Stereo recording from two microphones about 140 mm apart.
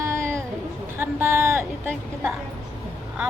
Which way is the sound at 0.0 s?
20° right (ahead or behind).